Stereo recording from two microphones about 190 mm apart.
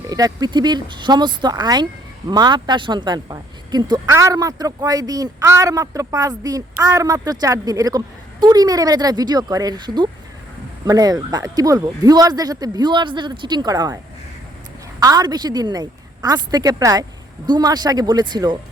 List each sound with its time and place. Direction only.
0.1 s a woman's voice: 20° right (ahead or behind)
15.0 s a woman's voice: 20° right (ahead or behind)